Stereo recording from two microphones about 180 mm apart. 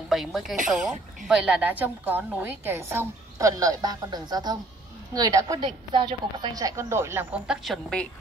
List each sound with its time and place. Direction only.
0.1 s a woman's voice: centre (ahead or behind)
7.6 s a woman's voice: 5° left (ahead or behind)